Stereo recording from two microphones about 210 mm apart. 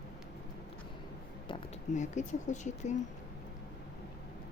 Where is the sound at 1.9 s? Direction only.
35° left (ahead or behind).